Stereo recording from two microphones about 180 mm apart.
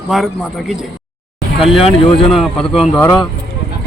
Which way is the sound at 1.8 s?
30° left (ahead or behind).